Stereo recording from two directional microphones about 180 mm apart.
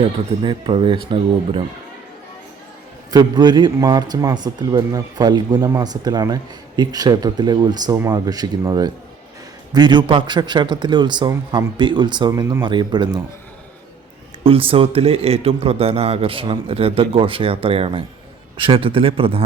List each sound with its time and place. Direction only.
0.0 s a man's voice: 30° right (ahead or behind)
3.1 s a man's voice: 20° right (ahead or behind)
14.4 s a man's voice: 30° right (ahead or behind)